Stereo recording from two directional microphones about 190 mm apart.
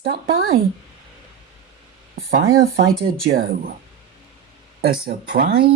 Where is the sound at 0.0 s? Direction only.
50° right (ahead or behind).